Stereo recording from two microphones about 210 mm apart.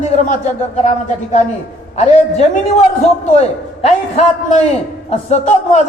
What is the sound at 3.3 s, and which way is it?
A man's voice, 30° left (ahead or behind).